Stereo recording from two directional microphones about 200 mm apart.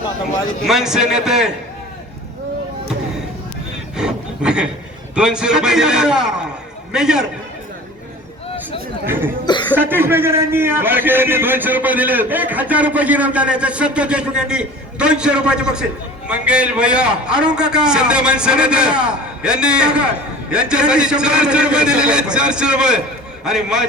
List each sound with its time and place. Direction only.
0.6 s a man's voice: centre (ahead or behind)
3.9 s a sound: 5° right (ahead or behind)
5.1 s a man's voice: 5° right (ahead or behind)
9.0 s speech: 10° right (ahead or behind)
9.5 s speech: 20° left (ahead or behind)
9.7 s a man's voice: 10° right (ahead or behind)